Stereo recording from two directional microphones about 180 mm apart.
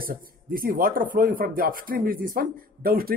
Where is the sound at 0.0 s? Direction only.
55° right (ahead or behind).